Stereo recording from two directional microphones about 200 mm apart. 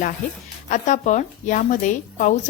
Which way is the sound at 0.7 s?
40° left (ahead or behind).